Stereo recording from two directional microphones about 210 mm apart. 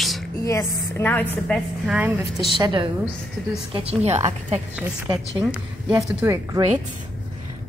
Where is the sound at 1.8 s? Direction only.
10° right (ahead or behind).